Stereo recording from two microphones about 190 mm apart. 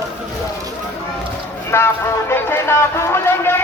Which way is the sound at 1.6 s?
15° left (ahead or behind).